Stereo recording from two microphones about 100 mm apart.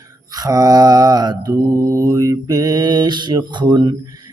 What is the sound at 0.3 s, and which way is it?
Mantra, 35° right (ahead or behind).